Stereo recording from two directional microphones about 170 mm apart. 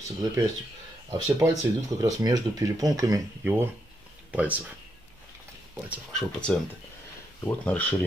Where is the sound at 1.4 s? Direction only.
20° right (ahead or behind).